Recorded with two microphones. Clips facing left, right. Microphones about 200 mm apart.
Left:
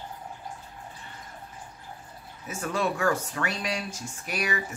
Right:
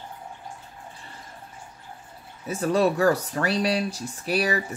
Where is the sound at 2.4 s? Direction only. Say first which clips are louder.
Right 7 dB; 35° right (ahead or behind).